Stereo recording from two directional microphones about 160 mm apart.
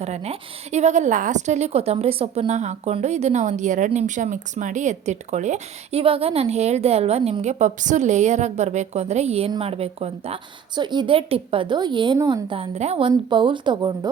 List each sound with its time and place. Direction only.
0.0 s a woman's voice: 40° right (ahead or behind)
10.8 s a woman's voice: 30° right (ahead or behind)
12.7 s a woman's voice: 40° right (ahead or behind); by 14.1 s 25° right (ahead or behind)